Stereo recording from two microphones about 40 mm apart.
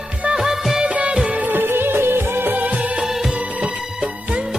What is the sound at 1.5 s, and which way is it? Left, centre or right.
Music, right.